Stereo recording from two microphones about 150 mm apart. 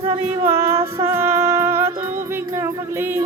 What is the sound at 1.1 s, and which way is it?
Music, 15° right (ahead or behind).